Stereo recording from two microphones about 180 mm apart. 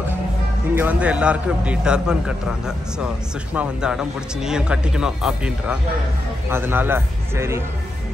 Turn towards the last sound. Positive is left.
turn(degrees=-15)  # may be behind; listen again after turning